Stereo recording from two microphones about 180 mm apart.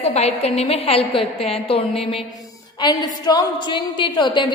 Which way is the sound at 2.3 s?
20° left (ahead or behind).